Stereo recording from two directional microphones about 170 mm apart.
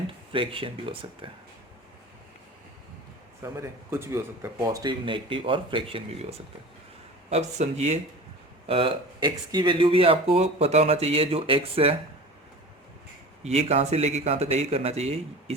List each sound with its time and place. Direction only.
0.3 s speech: 30° right (ahead or behind)
3.4 s speech: 15° right (ahead or behind)
4.6 s speech: 25° right (ahead or behind)
7.3 s speech: 40° right (ahead or behind)
13.4 s speech: 40° right (ahead or behind)